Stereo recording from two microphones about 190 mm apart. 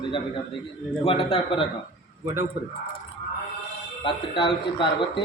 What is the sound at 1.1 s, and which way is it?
Speech, 30° left (ahead or behind).